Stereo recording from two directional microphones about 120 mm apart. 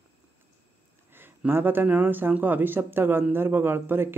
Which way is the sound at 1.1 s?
20° right (ahead or behind).